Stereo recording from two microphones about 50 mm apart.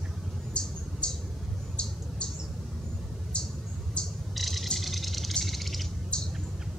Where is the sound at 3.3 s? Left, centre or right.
Centre.